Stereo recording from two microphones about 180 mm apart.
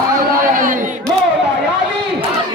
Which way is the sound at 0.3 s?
50° right (ahead or behind).